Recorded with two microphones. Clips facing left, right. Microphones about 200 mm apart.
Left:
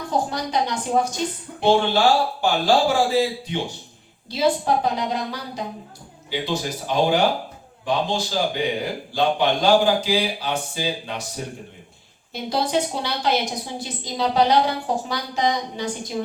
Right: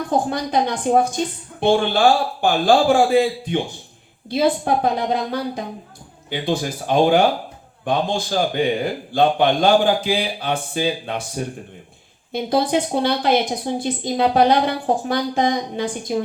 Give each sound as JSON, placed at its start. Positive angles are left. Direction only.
{"t": 0.1, "sound": "a woman's voice", "side_deg": -55}
{"t": 12.3, "sound": "a woman's voice", "side_deg": -55}